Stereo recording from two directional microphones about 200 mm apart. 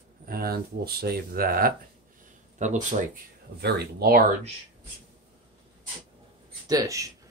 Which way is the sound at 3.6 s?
55° right (ahead or behind).